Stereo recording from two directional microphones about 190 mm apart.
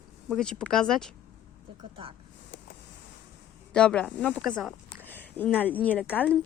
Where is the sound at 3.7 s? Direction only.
5° left (ahead or behind).